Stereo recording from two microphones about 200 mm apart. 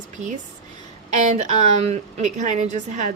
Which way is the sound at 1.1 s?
35° right (ahead or behind).